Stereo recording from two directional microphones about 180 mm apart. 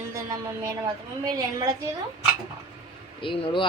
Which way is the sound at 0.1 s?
20° right (ahead or behind).